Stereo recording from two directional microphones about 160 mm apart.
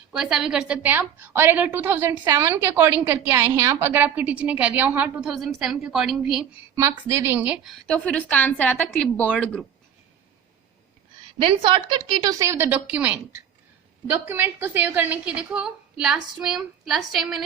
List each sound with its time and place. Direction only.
0.1 s a woman's voice: 5° right (ahead or behind)
6.7 s a woman's voice: 20° right (ahead or behind); by 9.6 s 5° left (ahead or behind)
11.3 s a woman's voice: 35° right (ahead or behind); by 17.4 s centre (ahead or behind)